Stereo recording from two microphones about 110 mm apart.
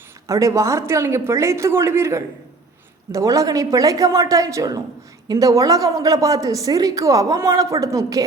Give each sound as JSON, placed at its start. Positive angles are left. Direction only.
{"t": 0.3, "sound": "a woman's voice", "side_deg": -30}